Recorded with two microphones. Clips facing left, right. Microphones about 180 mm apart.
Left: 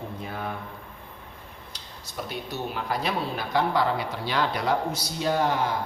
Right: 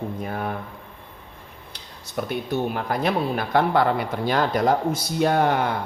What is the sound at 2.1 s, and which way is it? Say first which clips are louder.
Speech: right 8 dB; 55° right (ahead or behind).